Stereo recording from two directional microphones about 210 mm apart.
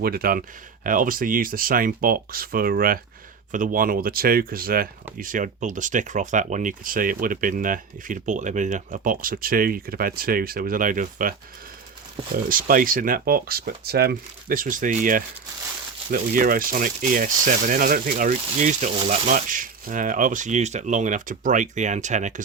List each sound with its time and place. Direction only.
0.0 s speech: 45° right (ahead or behind)
12.5 s speech: 40° right (ahead or behind)